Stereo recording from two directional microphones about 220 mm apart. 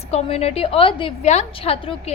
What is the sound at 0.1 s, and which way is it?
A woman's voice, 30° left (ahead or behind).